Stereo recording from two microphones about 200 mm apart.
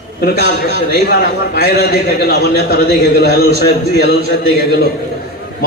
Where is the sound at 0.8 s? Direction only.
55° left (ahead or behind).